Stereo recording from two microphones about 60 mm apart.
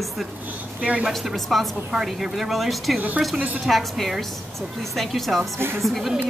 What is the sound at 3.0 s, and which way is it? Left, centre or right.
Speech, right.